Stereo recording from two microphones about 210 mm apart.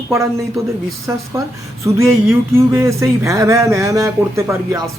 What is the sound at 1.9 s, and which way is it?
Speech, 15° right (ahead or behind).